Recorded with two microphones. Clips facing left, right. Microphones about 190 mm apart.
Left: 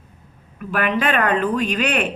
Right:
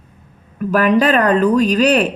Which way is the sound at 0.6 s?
40° right (ahead or behind).